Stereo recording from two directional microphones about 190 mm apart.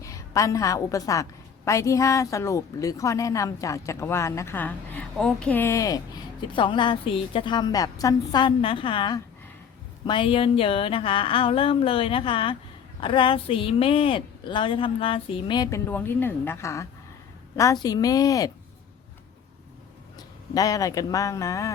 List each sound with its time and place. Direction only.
0.0 s a woman's voice: 15° left (ahead or behind)
17.8 s speech: 20° left (ahead or behind)
20.1 s speech: 20° left (ahead or behind)